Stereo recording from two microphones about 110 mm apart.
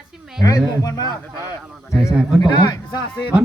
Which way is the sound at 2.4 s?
40° left (ahead or behind).